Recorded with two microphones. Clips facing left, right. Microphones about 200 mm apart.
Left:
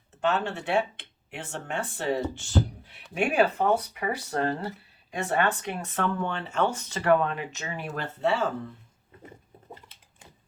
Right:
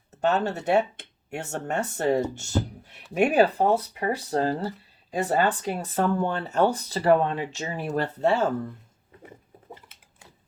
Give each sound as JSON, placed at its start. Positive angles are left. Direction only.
{"t": 0.2, "sound": "speech", "side_deg": -40}